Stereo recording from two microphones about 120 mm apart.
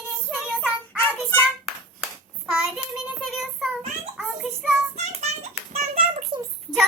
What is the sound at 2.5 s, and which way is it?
Child singing, 5° right (ahead or behind).